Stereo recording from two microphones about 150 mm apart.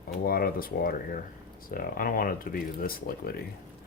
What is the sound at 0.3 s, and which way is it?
Speech, 85° left.